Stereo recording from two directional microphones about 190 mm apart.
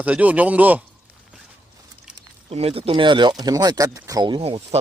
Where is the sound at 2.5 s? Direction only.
30° right (ahead or behind).